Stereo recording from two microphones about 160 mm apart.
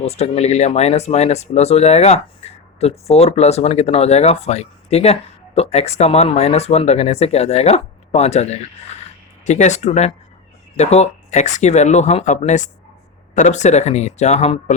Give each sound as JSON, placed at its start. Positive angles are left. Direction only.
{"t": 0.0, "sound": "speech", "side_deg": 40}